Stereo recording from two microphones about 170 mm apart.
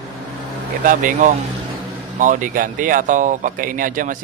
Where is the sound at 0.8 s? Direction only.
50° right (ahead or behind).